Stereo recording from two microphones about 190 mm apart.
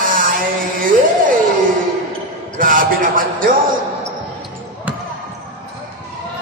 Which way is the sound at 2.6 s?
45° right (ahead or behind).